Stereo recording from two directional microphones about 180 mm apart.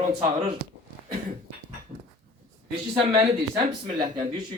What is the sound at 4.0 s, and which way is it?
Speech, 25° right (ahead or behind).